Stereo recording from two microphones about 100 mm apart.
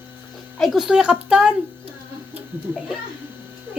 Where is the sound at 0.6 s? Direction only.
Centre (ahead or behind).